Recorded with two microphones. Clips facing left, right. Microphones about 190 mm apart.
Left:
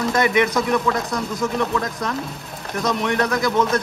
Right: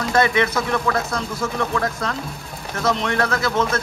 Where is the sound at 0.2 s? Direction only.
15° left (ahead or behind).